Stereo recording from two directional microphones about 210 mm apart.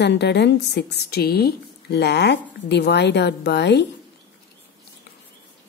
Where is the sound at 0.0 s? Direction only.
55° left (ahead or behind).